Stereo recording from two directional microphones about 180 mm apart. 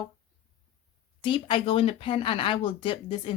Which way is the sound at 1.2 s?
30° left (ahead or behind).